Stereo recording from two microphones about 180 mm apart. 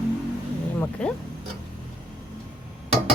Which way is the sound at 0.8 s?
5° left (ahead or behind).